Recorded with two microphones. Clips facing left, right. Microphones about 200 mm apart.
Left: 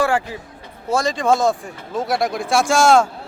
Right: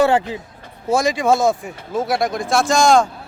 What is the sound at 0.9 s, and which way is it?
Speech, 10° right (ahead or behind).